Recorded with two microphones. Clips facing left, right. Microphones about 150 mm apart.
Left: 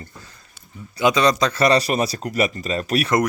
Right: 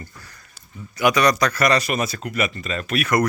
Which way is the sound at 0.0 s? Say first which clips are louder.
Even; 25° left (ahead or behind).